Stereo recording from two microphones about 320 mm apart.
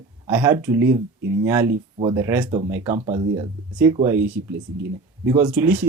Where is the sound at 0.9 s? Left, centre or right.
Right.